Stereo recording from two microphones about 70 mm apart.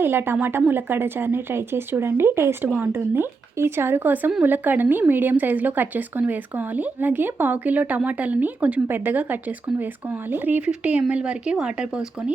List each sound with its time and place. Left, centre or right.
0.0 s a woman's voice: right; by 12.3 s centre